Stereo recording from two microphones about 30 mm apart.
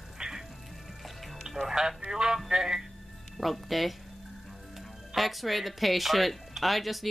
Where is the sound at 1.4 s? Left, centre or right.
Centre.